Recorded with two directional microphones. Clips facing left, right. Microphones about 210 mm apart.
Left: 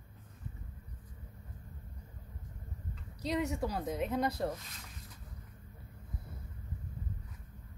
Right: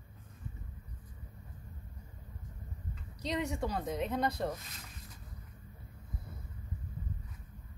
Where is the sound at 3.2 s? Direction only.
5° left (ahead or behind).